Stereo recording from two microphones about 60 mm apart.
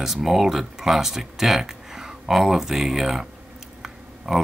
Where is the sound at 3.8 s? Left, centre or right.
Centre.